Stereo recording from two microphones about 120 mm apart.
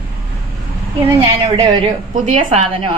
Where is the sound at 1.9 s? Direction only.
75° right (ahead or behind).